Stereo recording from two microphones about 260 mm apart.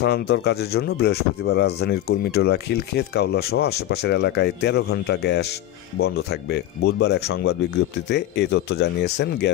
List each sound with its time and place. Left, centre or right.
0.0 s speech: left